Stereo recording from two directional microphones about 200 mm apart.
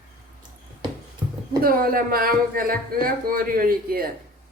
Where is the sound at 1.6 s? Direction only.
45° right (ahead or behind).